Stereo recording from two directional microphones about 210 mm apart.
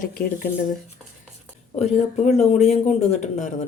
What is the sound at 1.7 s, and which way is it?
Speech, 30° left (ahead or behind).